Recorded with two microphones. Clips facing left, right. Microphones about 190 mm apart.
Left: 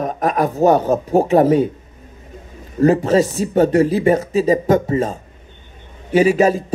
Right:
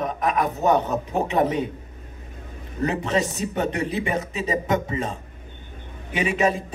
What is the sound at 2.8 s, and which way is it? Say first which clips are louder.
A man's voice: left 10 dB; 45° left (ahead or behind).